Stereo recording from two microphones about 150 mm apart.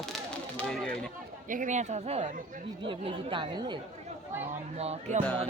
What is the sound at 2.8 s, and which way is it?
Speech, 35° right (ahead or behind).